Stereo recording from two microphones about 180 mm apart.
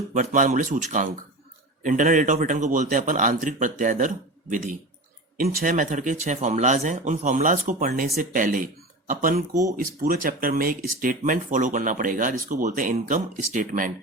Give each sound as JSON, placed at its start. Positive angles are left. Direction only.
{"t": 0.1, "sound": "speech", "side_deg": -45}